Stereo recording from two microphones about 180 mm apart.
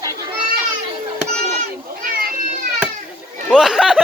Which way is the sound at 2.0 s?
55° right (ahead or behind).